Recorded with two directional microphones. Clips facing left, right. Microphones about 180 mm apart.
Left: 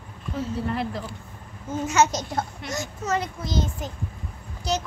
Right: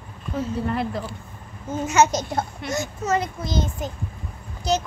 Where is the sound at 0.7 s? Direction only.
60° right (ahead or behind).